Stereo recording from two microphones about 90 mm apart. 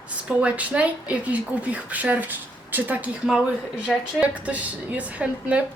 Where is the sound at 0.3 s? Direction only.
15° right (ahead or behind).